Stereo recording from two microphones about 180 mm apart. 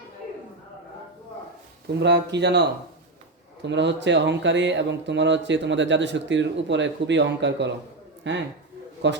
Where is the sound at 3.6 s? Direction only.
80° right.